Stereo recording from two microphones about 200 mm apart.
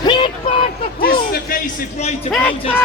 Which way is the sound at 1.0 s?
50° left (ahead or behind).